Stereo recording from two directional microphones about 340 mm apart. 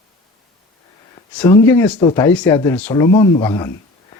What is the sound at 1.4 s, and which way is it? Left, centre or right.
Speech, centre.